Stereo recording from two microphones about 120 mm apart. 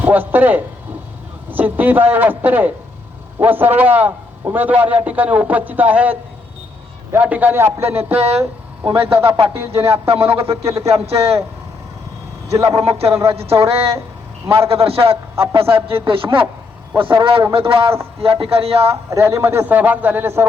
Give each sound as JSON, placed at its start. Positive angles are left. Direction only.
{"t": 0.0, "sound": "a man's voice", "side_deg": -15}
{"t": 8.1, "sound": "a man's voice", "side_deg": -60}
{"t": 12.7, "sound": "a man's voice", "side_deg": -55}
{"t": 19.1, "sound": "a man's voice", "side_deg": -20}